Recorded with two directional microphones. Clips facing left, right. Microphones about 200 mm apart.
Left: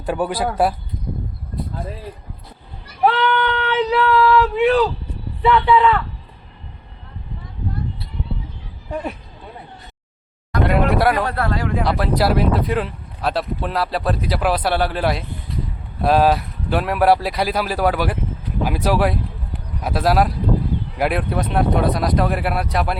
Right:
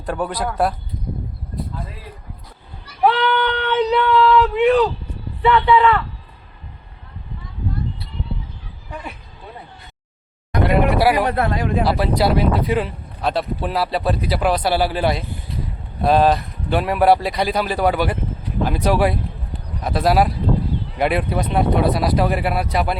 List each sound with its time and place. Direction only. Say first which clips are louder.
0.0 s speech: left 2 dB; 5° left (ahead or behind)
3.0 s a sound: even; centre (ahead or behind)
5.4 s speech: even; centre (ahead or behind)
10.7 s a sound: right 1 dB; centre (ahead or behind)
11.1 s speech: right 2 dB; 20° right (ahead or behind)
11.9 s speech: left 1 dB; centre (ahead or behind)